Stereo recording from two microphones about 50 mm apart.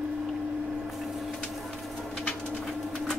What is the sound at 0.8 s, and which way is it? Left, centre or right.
Wood, centre.